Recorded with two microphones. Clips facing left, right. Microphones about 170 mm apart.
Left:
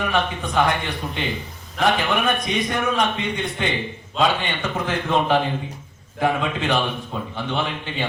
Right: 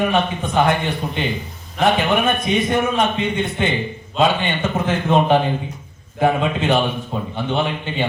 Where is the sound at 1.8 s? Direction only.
25° right (ahead or behind).